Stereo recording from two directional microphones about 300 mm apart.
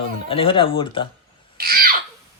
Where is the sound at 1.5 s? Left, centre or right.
Right.